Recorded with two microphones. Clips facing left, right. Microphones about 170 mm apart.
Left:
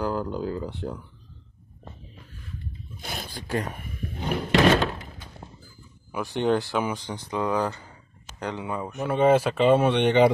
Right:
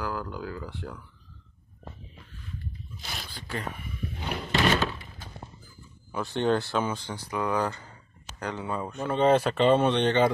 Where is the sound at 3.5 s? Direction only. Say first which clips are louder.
Left 6 dB; 45° left (ahead or behind).